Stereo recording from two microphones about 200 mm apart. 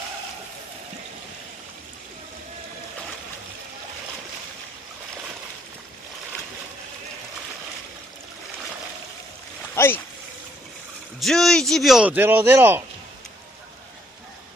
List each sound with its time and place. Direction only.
9.8 s speech: 10° left (ahead or behind)
11.1 s speech: centre (ahead or behind)